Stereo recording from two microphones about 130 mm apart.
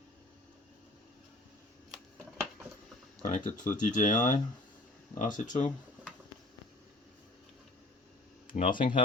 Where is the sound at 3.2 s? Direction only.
85° left.